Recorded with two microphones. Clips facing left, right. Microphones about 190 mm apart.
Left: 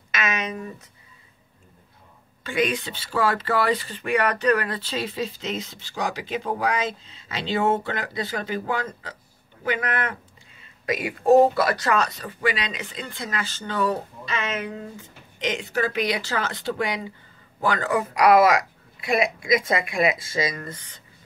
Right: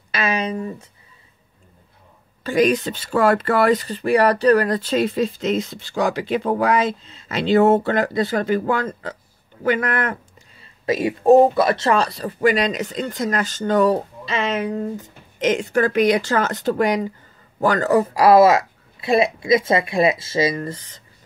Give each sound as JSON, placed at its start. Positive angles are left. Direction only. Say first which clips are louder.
{"t": 0.1, "sound": "a sound", "louder": "right 5 dB", "side_deg": -30}
{"t": 2.4, "sound": "speech", "louder": "right 7 dB", "side_deg": -40}
{"t": 10.6, "sound": "speech", "louder": "right 7 dB", "side_deg": -30}